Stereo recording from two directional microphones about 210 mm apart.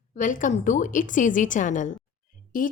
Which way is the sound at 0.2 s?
40° left (ahead or behind).